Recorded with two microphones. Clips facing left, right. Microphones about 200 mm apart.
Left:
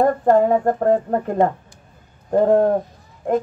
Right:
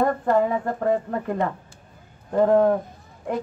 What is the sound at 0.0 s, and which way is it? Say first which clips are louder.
Speech: left 5 dB; 50° left (ahead or behind).